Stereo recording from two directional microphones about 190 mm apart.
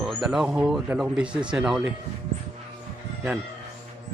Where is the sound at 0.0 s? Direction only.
Centre (ahead or behind).